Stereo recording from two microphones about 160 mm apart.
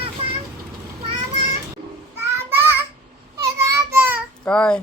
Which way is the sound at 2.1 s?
15° right (ahead or behind).